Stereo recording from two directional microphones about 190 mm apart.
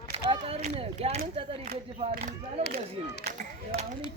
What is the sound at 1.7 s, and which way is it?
Speech, 50° right (ahead or behind).